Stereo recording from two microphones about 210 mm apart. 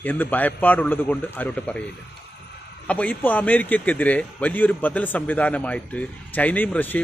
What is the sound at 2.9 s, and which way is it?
A man's voice, 5° left (ahead or behind).